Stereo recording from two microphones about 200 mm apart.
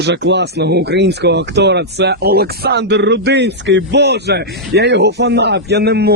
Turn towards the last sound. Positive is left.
turn(degrees=-55)  # may be behind; listen again after turning